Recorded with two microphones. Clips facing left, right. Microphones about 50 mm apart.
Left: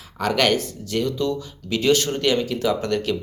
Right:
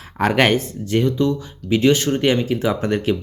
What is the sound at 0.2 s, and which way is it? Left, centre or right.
Speech, right.